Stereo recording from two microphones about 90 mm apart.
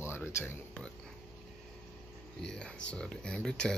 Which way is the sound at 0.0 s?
30° left (ahead or behind).